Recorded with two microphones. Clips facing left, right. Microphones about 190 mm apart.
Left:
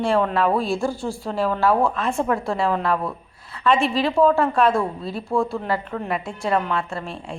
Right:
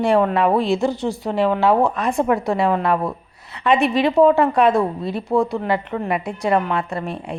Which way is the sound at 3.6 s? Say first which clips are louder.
Right 3 dB; 20° right (ahead or behind).